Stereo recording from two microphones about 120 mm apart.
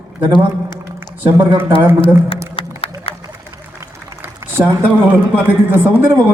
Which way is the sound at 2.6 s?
50° left (ahead or behind).